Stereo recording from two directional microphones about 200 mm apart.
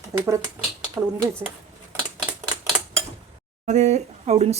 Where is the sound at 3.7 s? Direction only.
35° right (ahead or behind).